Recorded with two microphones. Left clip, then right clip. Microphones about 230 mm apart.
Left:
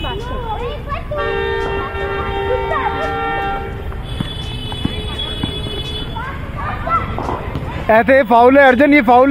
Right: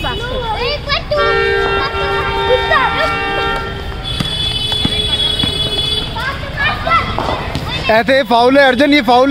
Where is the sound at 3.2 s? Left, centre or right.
Right.